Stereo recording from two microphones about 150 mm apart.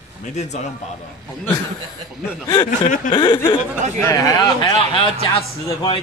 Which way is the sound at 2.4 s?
30° left (ahead or behind).